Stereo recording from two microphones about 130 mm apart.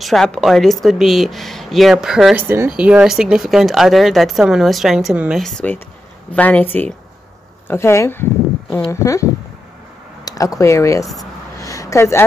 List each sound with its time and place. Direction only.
0.0 s speech: centre (ahead or behind)
2.3 s speech: 20° right (ahead or behind)
2.7 s speech: 5° right (ahead or behind)
5.4 s speech: 5° left (ahead or behind); by 11.1 s 25° left (ahead or behind)
11.5 s a sound: 25° left (ahead or behind)